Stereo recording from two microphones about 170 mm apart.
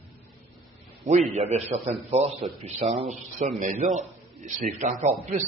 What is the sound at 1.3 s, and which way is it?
A man's voice, 40° right (ahead or behind).